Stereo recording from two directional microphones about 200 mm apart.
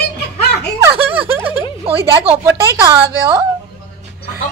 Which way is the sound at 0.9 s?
25° right (ahead or behind).